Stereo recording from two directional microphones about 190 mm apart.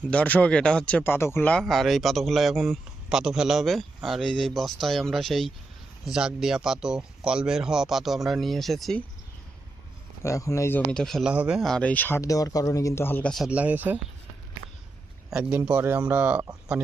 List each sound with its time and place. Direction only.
0.1 s speech: 5° left (ahead or behind)
10.2 s speech: 15° left (ahead or behind)
10.9 s speech: centre (ahead or behind)
15.3 s speech: 5° right (ahead or behind)